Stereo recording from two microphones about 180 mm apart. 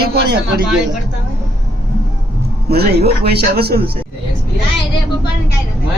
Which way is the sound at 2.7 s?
60° right (ahead or behind).